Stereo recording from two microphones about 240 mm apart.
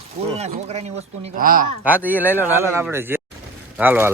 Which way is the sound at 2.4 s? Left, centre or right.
Centre.